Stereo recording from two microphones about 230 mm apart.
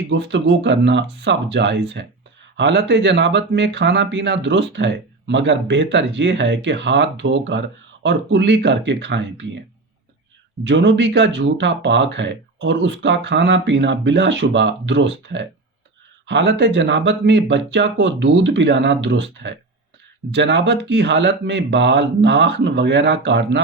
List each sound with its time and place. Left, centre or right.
0.1 s speech: right
10.6 s speech: right